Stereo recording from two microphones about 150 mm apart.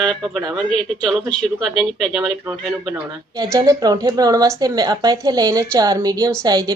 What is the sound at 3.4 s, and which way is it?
A woman's voice, 25° right (ahead or behind).